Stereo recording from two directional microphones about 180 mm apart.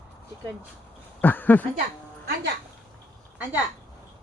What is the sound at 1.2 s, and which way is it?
Speech, 10° left (ahead or behind).